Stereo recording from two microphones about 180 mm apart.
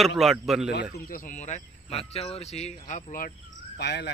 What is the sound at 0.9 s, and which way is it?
Speech, 50° left (ahead or behind).